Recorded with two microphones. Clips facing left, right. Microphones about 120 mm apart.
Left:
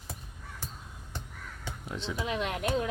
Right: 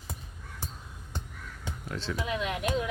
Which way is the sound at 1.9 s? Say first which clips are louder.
Right 1 dB; 20° left (ahead or behind).